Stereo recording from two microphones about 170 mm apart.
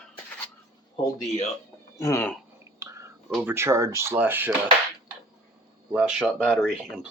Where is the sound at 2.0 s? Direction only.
15° left (ahead or behind).